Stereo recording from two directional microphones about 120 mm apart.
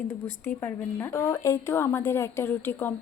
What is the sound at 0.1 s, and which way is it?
A woman's voice, 20° left (ahead or behind).